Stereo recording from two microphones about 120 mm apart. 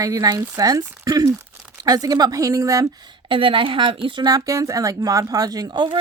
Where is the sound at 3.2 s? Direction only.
45° right (ahead or behind).